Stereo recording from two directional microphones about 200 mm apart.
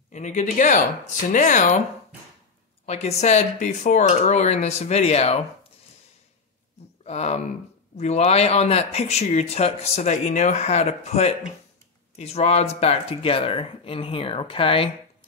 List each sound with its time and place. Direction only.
0.1 s speech: 35° left (ahead or behind)
2.9 s speech: 35° left (ahead or behind)
7.1 s speech: 35° left (ahead or behind)